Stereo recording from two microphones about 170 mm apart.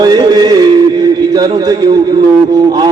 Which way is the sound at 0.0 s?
25° right (ahead or behind).